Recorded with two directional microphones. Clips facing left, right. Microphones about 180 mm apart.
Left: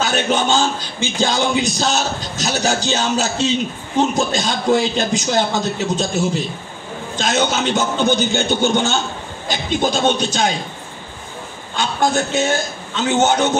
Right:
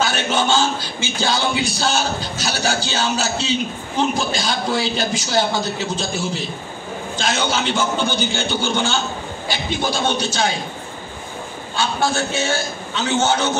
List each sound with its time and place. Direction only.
0.0 s a man's voice: 15° left (ahead or behind)
7.2 s a man's voice: 20° left (ahead or behind)
11.7 s a man's voice: 15° left (ahead or behind)